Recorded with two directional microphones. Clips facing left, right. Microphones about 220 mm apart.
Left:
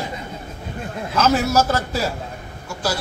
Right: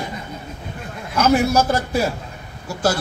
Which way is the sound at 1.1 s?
15° right (ahead or behind).